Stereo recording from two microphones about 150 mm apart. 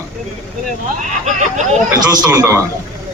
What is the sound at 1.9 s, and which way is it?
Speech, 25° right (ahead or behind).